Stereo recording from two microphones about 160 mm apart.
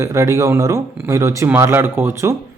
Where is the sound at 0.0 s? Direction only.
20° right (ahead or behind).